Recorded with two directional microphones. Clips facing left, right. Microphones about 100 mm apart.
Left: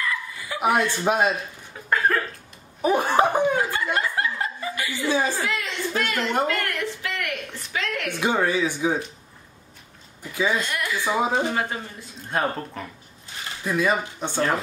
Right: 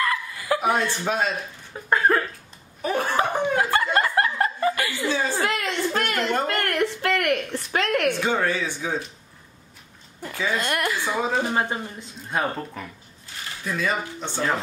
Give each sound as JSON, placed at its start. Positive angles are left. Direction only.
{"t": 0.0, "sound": "chuckle", "side_deg": -60}
{"t": 0.6, "sound": "speech", "side_deg": 15}
{"t": 1.9, "sound": "speech", "side_deg": -25}
{"t": 2.8, "sound": "speech", "side_deg": 15}
{"t": 3.5, "sound": "chuckle", "side_deg": -60}
{"t": 5.0, "sound": "speech", "side_deg": 15}
{"t": 5.4, "sound": "a sound", "side_deg": -55}
{"t": 6.4, "sound": "speech", "side_deg": -50}
{"t": 8.2, "sound": "speech", "side_deg": 15}
{"t": 10.6, "sound": "speech", "side_deg": -55}
{"t": 11.1, "sound": "speech", "side_deg": 15}
{"t": 11.5, "sound": "speech", "side_deg": -30}
{"t": 12.3, "sound": "speech", "side_deg": 0}
{"t": 13.7, "sound": "speech", "side_deg": 15}